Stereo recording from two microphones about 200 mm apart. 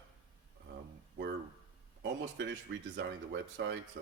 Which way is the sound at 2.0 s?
65° right (ahead or behind).